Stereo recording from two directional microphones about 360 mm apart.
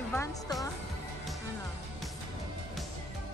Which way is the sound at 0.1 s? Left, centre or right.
Centre.